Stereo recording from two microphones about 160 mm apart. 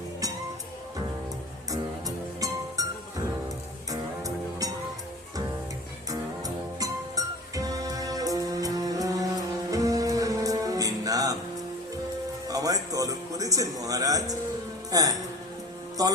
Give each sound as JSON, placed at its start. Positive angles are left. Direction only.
{"t": 1.7, "sound": "music", "side_deg": -20}
{"t": 3.8, "sound": "music", "side_deg": -20}
{"t": 6.1, "sound": "music", "side_deg": -20}
{"t": 12.5, "sound": "music", "side_deg": -20}
{"t": 14.8, "sound": "speech", "side_deg": -20}
{"t": 16.0, "sound": "music", "side_deg": -25}